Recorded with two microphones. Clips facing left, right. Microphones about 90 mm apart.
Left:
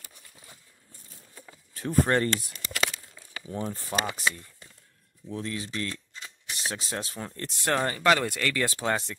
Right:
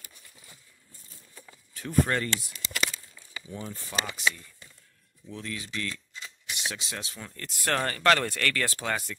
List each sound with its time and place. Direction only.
1.3 s a sound: 20° left (ahead or behind)
1.7 s speech: 35° left (ahead or behind)
2.5 s a sound: 50° left (ahead or behind)
3.4 s speech: 45° left (ahead or behind)
5.3 s speech: 30° left (ahead or behind)
7.7 s speech: 15° left (ahead or behind)
8.8 s speech: 25° left (ahead or behind)